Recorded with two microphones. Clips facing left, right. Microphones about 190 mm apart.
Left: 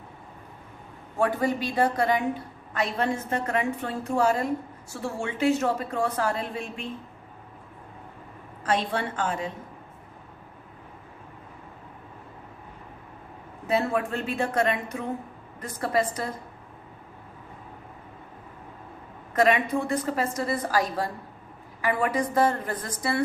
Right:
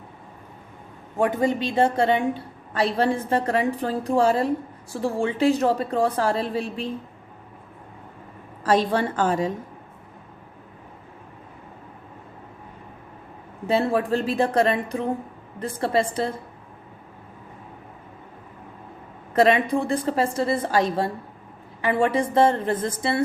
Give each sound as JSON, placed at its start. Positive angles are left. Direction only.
{"t": 1.2, "sound": "a woman's voice", "side_deg": -20}
{"t": 8.6, "sound": "a woman's voice", "side_deg": -40}
{"t": 13.7, "sound": "a woman's voice", "side_deg": -30}
{"t": 19.3, "sound": "a woman's voice", "side_deg": -30}